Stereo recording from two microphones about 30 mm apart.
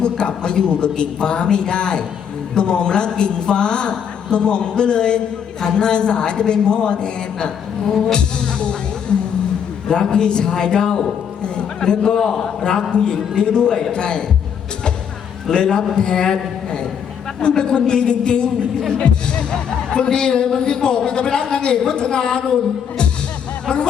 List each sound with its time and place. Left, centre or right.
0.0 s a woman's voice: left
12.9 s a woman's voice: left
15.5 s a man's voice: left
18.9 s music: left
19.5 s a man's voice: left
23.6 s speech: left